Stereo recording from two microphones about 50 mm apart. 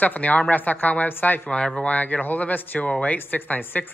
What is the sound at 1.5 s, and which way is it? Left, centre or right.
Speech, left.